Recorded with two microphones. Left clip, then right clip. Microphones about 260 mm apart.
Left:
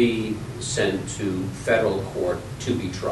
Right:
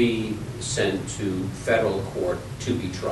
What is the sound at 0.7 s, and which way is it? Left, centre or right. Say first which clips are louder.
A man's voice: left 1 dB; centre.